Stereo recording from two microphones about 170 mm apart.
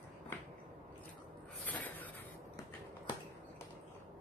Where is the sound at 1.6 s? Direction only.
10° left (ahead or behind).